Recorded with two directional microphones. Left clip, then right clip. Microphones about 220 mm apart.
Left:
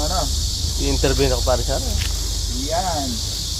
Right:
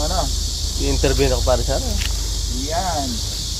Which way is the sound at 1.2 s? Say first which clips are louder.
Right 1 dB; centre (ahead or behind).